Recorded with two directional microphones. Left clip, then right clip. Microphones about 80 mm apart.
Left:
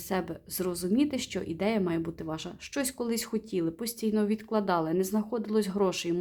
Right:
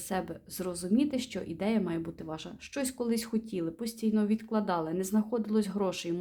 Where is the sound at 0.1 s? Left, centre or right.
Left.